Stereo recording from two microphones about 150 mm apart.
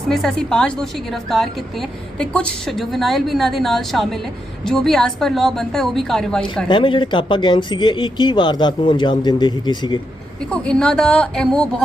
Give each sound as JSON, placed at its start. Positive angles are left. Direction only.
{"t": 0.1, "sound": "a woman's voice", "side_deg": 5}
{"t": 6.7, "sound": "speech", "side_deg": 30}
{"t": 10.4, "sound": "a woman's voice", "side_deg": 5}